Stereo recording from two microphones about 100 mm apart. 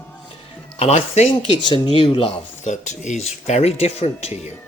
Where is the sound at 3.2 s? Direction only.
90° left.